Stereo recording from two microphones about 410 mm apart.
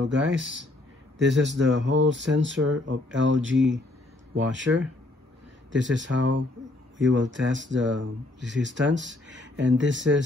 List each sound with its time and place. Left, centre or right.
0.0 s speech: right